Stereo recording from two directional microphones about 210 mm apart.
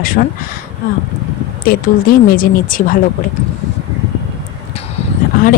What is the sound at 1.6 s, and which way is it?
Speech, 45° left (ahead or behind).